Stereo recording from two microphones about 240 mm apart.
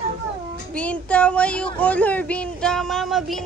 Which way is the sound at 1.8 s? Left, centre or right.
Centre.